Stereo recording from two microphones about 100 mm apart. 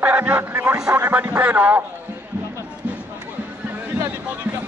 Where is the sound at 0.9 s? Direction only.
20° right (ahead or behind).